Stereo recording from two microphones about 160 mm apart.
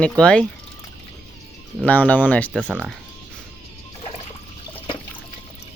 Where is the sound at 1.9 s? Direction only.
10° left (ahead or behind).